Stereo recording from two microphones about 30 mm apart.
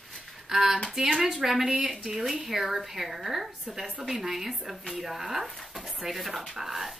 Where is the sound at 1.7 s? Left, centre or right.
Centre.